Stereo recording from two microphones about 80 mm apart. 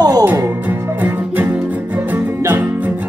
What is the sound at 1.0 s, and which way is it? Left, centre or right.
Music, right.